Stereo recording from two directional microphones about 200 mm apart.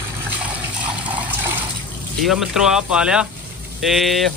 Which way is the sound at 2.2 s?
Centre (ahead or behind).